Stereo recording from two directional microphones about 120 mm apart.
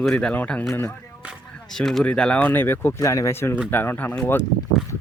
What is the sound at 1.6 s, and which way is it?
Speech, 5° left (ahead or behind).